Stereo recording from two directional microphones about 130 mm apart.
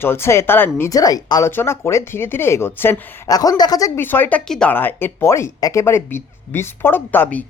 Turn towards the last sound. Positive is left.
turn(degrees=15)  # may be behind; listen again after turning